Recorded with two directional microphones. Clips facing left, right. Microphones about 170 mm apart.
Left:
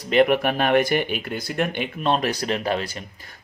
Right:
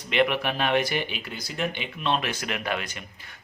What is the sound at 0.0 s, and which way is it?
Speech, 40° left (ahead or behind).